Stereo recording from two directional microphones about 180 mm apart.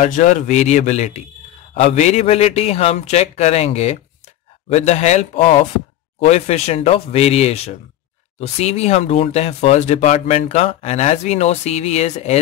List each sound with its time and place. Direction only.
0.0 s speech: 45° left (ahead or behind)